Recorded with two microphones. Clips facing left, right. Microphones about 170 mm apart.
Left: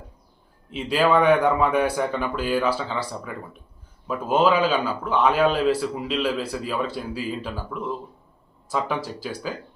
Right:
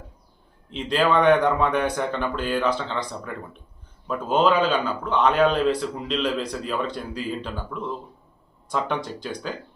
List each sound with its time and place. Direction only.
0.7 s a man's voice: 5° left (ahead or behind)